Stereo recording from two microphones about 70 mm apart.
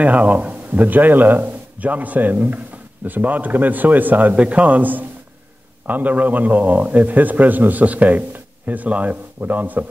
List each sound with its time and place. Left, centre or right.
0.0 s speech: right